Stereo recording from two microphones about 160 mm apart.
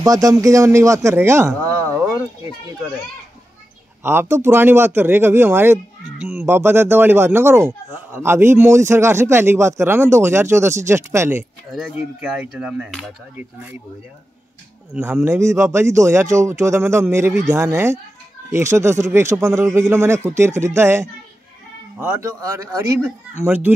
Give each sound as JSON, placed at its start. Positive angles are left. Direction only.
{"t": 0.0, "sound": "speech", "side_deg": -20}
{"t": 4.0, "sound": "speech", "side_deg": -15}
{"t": 11.7, "sound": "speech", "side_deg": -5}
{"t": 15.0, "sound": "speech", "side_deg": -15}